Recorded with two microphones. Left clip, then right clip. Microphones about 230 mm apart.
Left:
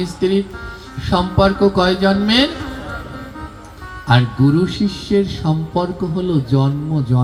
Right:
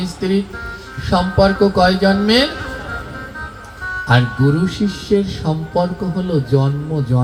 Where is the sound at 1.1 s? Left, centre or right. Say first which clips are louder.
Right 1 dB; left.